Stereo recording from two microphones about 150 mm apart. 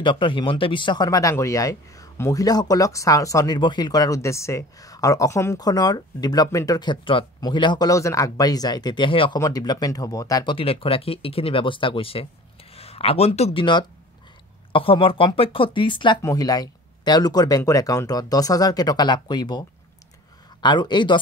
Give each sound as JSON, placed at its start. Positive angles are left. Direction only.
{"t": 0.0, "sound": "speech", "side_deg": 35}
{"t": 9.4, "sound": "speech", "side_deg": 25}
{"t": 20.6, "sound": "speech", "side_deg": 30}